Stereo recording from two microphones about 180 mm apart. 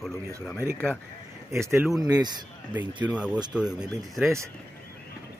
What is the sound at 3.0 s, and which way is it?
Speech, 5° right (ahead or behind).